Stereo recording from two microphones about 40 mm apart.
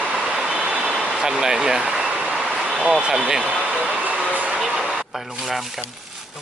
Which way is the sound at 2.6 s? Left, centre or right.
Right.